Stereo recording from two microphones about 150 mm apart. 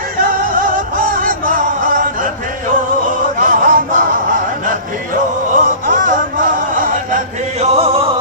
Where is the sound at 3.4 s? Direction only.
65° right (ahead or behind).